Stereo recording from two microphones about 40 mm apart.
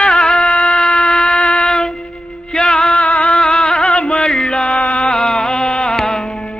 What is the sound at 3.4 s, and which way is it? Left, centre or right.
Music, left.